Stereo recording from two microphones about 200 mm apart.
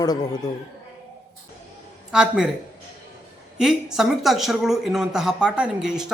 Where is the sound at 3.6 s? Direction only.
Centre (ahead or behind).